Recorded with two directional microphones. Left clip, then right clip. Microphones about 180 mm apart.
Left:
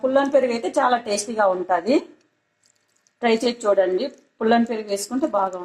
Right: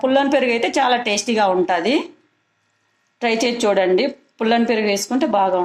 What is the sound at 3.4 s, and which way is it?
A woman's voice, 40° right (ahead or behind).